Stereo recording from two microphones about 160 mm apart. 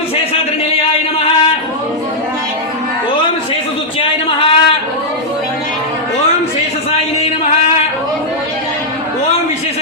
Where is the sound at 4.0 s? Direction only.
35° left (ahead or behind).